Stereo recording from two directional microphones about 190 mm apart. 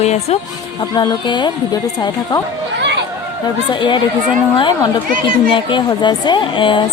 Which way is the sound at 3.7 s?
25° left (ahead or behind).